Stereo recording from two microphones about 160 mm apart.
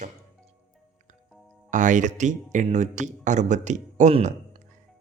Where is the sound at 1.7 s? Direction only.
50° right (ahead or behind).